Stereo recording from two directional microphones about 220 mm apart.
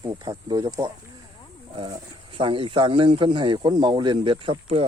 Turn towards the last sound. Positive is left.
turn(degrees=-25)  # may be behind; listen again after turning